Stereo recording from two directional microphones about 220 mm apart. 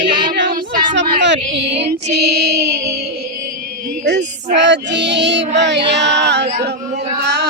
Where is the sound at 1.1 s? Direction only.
55° right (ahead or behind).